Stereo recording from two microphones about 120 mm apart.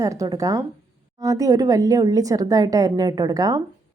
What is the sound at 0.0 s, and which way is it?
A woman's voice, 30° right (ahead or behind).